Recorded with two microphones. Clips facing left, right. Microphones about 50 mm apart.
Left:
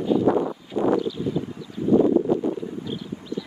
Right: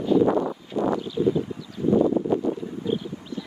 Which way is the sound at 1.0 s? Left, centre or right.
Centre.